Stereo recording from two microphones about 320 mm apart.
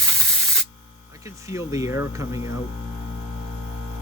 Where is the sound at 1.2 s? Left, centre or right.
Centre.